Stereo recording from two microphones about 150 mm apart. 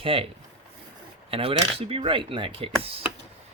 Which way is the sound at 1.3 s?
40° right (ahead or behind).